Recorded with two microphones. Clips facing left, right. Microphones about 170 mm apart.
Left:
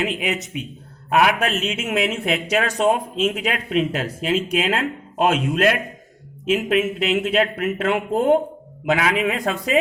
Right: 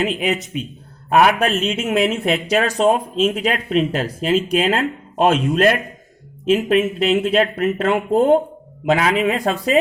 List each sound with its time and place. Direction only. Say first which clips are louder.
0.0 s a man's voice: right 3 dB; 35° right (ahead or behind)